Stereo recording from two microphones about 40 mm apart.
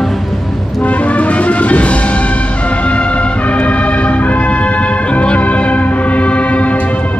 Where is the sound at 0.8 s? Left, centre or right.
Left.